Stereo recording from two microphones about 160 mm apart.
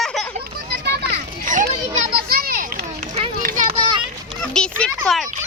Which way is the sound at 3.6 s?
35° right (ahead or behind).